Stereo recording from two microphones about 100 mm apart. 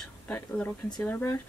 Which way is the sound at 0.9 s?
15° left (ahead or behind).